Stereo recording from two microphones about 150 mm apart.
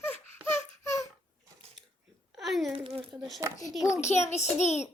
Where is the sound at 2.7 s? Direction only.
35° right (ahead or behind).